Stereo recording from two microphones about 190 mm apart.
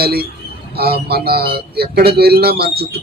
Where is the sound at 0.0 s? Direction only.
55° right (ahead or behind).